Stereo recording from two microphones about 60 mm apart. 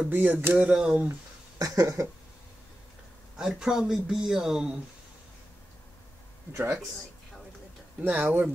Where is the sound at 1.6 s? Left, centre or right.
Right.